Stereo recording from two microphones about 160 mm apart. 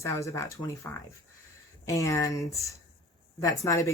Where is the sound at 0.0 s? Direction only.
20° left (ahead or behind).